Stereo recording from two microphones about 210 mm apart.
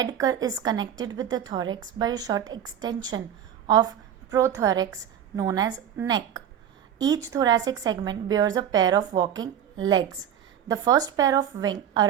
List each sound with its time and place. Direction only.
0.0 s a woman's voice: 20° right (ahead or behind)